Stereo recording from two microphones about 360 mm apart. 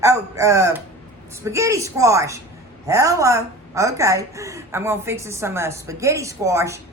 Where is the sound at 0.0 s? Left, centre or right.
Centre.